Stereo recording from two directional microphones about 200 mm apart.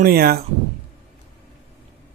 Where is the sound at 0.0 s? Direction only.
50° right (ahead or behind).